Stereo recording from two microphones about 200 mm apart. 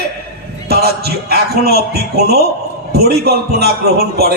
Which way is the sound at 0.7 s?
50° right (ahead or behind).